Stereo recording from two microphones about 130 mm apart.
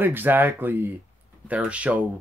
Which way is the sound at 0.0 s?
15° right (ahead or behind).